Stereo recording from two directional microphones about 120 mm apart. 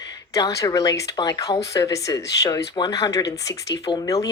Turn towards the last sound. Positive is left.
turn(degrees=30)  # may be behind; listen again after turning